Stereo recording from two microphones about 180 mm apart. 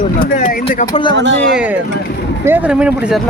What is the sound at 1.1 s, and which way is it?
Speech, 80° right.